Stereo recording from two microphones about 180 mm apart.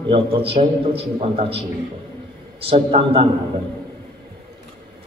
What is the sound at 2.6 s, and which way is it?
Speech, 30° right (ahead or behind).